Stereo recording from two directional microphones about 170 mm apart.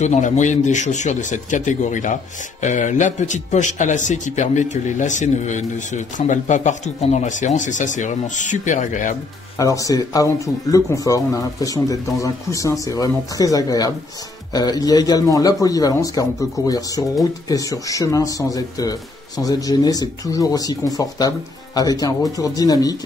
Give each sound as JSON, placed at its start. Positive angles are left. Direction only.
{"t": 0.0, "sound": "a man's voice", "side_deg": 45}
{"t": 9.6, "sound": "speech", "side_deg": 20}